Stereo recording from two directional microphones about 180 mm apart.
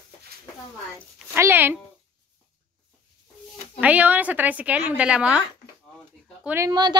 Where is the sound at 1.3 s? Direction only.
15° right (ahead or behind).